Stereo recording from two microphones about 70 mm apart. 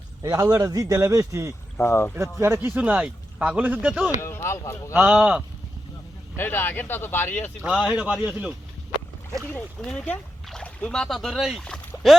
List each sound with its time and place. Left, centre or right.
0.2 s a man's voice: right
1.8 s speech: left
2.4 s speech: right
2.7 s speech: centre
4.2 s speech: left
5.0 s speech: centre
6.3 s speech: left
7.7 s speech: centre
8.2 s speech: centre
9.6 s speech: centre
10.5 s speech: centre
11.3 s speech: centre